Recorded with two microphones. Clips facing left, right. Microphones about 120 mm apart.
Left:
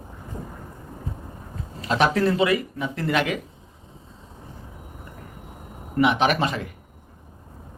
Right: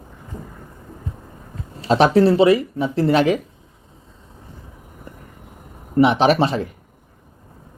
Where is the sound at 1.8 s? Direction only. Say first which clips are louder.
Right 7 dB; 30° right (ahead or behind).